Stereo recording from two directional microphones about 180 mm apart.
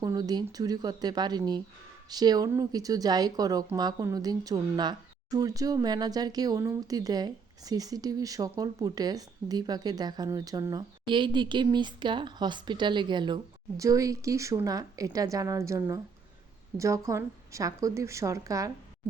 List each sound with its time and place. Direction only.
0.0 s a woman's voice: 20° right (ahead or behind)